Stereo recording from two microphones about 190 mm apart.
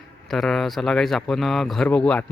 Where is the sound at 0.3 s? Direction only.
Centre (ahead or behind).